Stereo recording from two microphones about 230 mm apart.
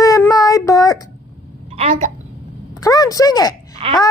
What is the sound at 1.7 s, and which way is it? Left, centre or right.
Speech, right.